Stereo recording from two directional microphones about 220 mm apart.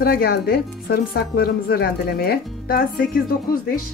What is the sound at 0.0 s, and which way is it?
Speech, 45° left (ahead or behind).